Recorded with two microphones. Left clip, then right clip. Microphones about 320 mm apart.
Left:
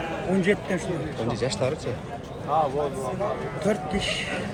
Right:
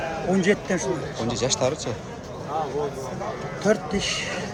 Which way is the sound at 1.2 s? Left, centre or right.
Centre.